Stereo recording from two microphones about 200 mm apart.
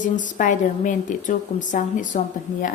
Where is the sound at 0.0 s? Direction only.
40° left (ahead or behind).